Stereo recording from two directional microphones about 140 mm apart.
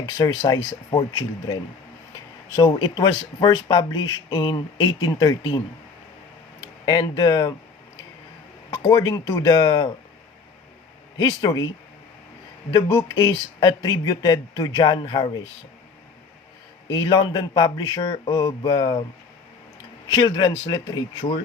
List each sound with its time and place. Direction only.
0.0 s speech: 25° left (ahead or behind)
2.1 s a sound: 25° left (ahead or behind)
3.0 s speech: 25° left (ahead or behind)
6.8 s speech: 35° left (ahead or behind)
8.8 s speech: 30° left (ahead or behind)
11.2 s speech: 25° left (ahead or behind)
12.7 s speech: 20° left (ahead or behind)
17.0 s speech: 25° left (ahead or behind)
20.1 s speech: 35° left (ahead or behind)